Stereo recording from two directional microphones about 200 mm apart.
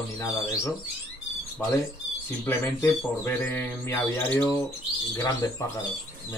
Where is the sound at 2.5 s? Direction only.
15° left (ahead or behind).